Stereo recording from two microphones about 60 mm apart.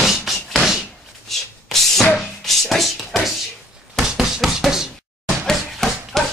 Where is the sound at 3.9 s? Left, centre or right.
Centre.